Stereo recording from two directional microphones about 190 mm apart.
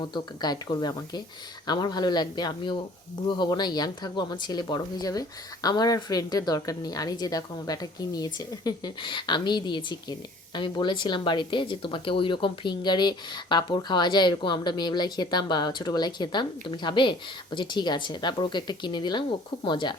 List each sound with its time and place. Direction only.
0.0 s a woman's voice: 20° left (ahead or behind)